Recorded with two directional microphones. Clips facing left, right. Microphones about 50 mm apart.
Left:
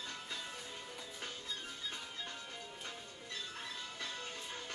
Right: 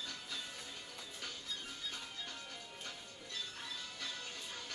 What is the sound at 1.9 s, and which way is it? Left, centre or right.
Music, left.